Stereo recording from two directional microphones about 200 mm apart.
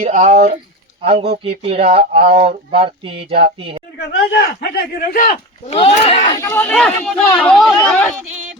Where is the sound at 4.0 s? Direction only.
55° left (ahead or behind).